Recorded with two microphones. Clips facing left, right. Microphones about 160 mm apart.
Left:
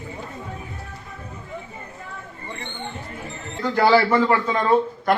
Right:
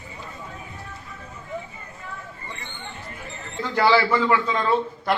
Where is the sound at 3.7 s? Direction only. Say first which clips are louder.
Left 2 dB; 45° left (ahead or behind).